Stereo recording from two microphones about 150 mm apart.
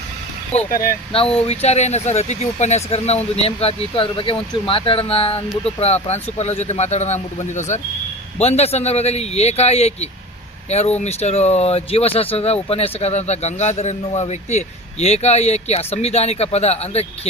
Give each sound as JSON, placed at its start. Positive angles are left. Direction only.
{"t": 0.7, "sound": "speech", "side_deg": 70}
{"t": 1.1, "sound": "speech", "side_deg": 40}